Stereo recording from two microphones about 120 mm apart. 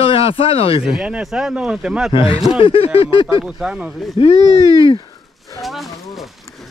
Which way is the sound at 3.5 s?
5° right (ahead or behind).